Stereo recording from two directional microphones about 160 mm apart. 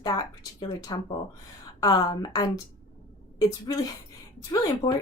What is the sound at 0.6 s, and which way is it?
A woman's voice, 25° left (ahead or behind).